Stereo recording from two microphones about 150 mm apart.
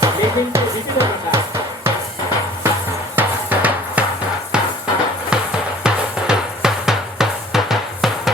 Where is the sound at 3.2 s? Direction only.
10° right (ahead or behind).